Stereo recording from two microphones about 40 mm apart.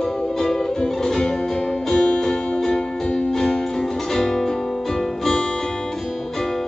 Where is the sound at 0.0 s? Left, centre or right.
Centre.